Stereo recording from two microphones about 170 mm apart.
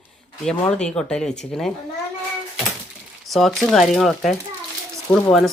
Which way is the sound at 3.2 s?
Centre (ahead or behind).